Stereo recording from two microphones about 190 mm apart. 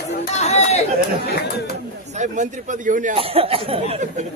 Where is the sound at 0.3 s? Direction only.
35° left (ahead or behind).